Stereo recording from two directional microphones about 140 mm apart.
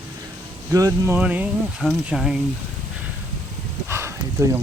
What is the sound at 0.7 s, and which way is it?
Speech, 25° right (ahead or behind).